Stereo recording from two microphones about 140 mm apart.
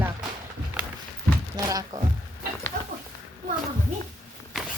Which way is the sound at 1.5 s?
25° right (ahead or behind).